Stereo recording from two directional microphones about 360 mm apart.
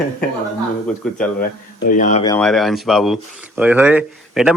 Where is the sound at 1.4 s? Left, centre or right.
Left.